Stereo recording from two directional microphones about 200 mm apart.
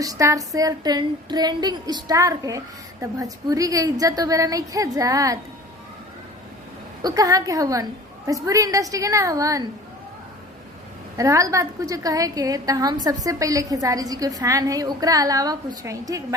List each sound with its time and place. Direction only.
0.0 s a woman's voice: 15° right (ahead or behind)
7.0 s a woman's voice: 15° right (ahead or behind)
11.2 s a woman's voice: 15° right (ahead or behind)